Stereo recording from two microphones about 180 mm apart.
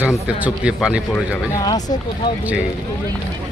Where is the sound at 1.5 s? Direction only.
20° left (ahead or behind).